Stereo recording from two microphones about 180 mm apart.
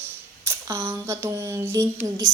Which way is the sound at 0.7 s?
15° right (ahead or behind).